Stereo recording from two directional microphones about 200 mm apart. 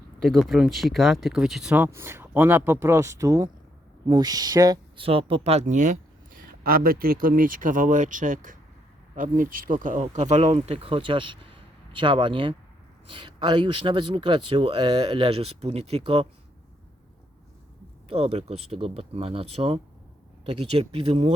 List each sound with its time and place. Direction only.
0.2 s speech: centre (ahead or behind); by 5.9 s 35° right (ahead or behind)
6.3 s speech: 50° right (ahead or behind); by 16.2 s 30° right (ahead or behind)
18.1 s speech: 30° right (ahead or behind)